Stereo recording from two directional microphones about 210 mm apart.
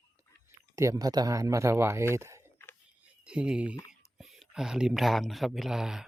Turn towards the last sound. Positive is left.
turn(degrees=0)  # may be behind; listen again after turning